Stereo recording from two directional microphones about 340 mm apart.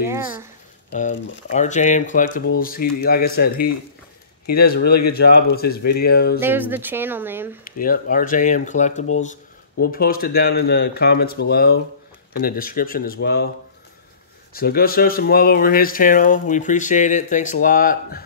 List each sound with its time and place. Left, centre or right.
0.0 s speech: centre
0.9 s speech: left
6.4 s speech: centre
7.6 s speech: left
14.5 s speech: left